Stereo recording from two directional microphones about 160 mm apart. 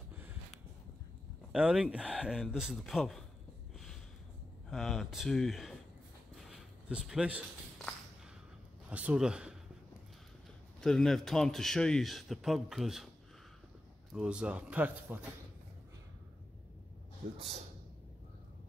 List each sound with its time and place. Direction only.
0.1 s a sound: 10° right (ahead or behind)
1.5 s a man's voice: 5° right (ahead or behind)
3.7 s a sound: centre (ahead or behind)
4.6 s a man's voice: centre (ahead or behind)
6.3 s a sound: centre (ahead or behind)
7.8 s walk: centre (ahead or behind)
8.9 s a man's voice: 5° right (ahead or behind)
10.8 s a man's voice: 5° left (ahead or behind)
14.1 s speech: 5° right (ahead or behind)